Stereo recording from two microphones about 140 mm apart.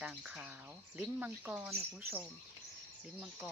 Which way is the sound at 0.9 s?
15° right (ahead or behind).